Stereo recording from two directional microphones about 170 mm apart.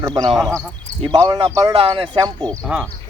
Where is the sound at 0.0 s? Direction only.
20° right (ahead or behind).